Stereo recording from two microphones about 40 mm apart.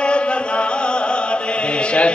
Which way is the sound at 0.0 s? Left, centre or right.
Left.